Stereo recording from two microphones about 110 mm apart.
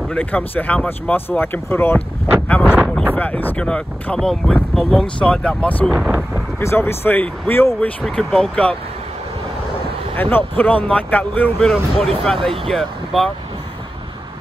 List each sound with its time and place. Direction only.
0.1 s speech: 15° left (ahead or behind)
5.9 s a sound: 10° right (ahead or behind)
6.6 s speech: 20° left (ahead or behind)
8.0 s speech: 5° left (ahead or behind)
10.1 s speech: 15° left (ahead or behind)